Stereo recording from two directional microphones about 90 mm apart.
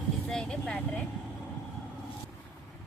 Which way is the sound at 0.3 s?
5° left (ahead or behind).